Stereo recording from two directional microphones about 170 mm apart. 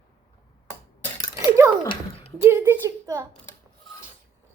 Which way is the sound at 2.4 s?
15° right (ahead or behind).